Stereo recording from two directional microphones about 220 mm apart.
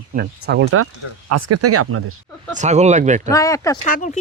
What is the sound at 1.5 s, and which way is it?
Speech, 90° right.